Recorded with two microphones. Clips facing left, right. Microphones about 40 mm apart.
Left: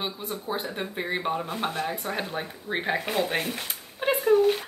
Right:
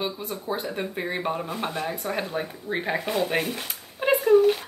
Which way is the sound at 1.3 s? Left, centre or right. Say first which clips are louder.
Even; centre.